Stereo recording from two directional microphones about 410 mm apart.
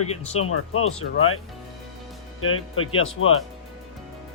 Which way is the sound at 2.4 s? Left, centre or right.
Left.